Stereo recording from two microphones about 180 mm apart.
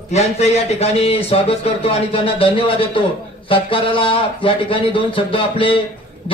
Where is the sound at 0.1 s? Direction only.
35° left (ahead or behind).